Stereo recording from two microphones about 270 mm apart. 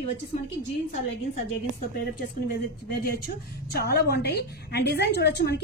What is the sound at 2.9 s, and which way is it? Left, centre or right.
A woman's voice, left.